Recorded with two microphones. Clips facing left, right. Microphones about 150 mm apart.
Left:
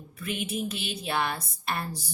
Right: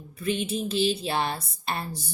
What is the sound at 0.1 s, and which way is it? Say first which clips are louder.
A woman's voice: right 5 dB; 25° right (ahead or behind).